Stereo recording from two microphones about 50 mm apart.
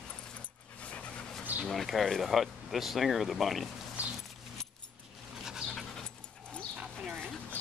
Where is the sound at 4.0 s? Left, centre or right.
Right.